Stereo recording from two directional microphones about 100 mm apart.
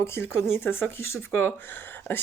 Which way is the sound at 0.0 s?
25° left (ahead or behind).